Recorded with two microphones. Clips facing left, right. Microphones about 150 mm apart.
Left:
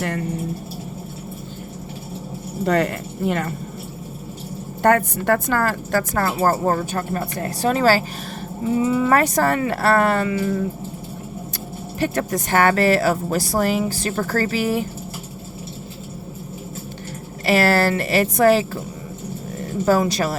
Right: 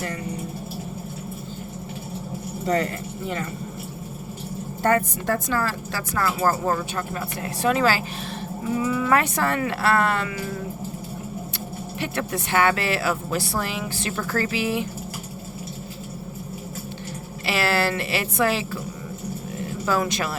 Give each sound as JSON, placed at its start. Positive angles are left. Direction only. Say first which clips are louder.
{"t": 0.0, "sound": "speech", "louder": "left 6 dB", "side_deg": 65}
{"t": 2.6, "sound": "speech", "louder": "left 4 dB", "side_deg": 65}
{"t": 4.8, "sound": "a woman's voice", "louder": "left 4 dB", "side_deg": 70}
{"t": 8.6, "sound": "speech", "louder": "left 5 dB", "side_deg": 25}
{"t": 10.2, "sound": "a sound", "louder": "left 9 dB", "side_deg": 30}
{"t": 11.9, "sound": "speech", "louder": "left 6 dB", "side_deg": 40}
{"t": 17.4, "sound": "a woman's voice", "louder": "left 6 dB", "side_deg": 45}
{"t": 19.5, "sound": "a sound", "louder": "left 7 dB", "side_deg": 45}
{"t": 20.0, "sound": "speech", "louder": "left 5 dB", "side_deg": 35}